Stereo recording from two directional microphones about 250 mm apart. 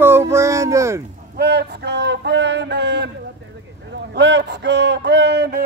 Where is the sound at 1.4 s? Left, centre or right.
Right.